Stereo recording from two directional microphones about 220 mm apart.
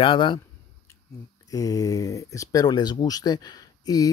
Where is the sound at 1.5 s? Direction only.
15° left (ahead or behind).